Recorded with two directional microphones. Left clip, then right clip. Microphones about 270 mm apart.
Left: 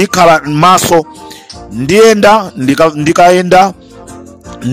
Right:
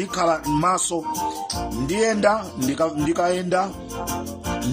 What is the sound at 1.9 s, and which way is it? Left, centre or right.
Speech, left.